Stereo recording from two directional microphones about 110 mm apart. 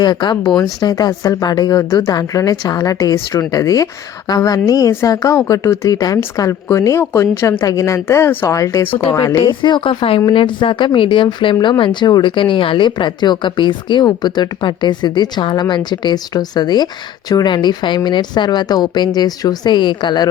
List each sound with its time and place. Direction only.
0.0 s a woman's voice: 40° left (ahead or behind)
8.9 s speech: 55° left (ahead or behind)
9.5 s a woman's voice: 45° left (ahead or behind)